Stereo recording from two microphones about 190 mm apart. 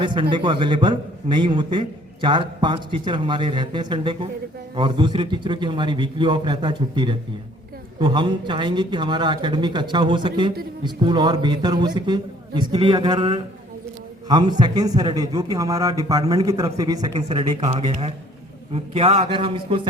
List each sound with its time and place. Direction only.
0.0 s a man's voice: 25° right (ahead or behind)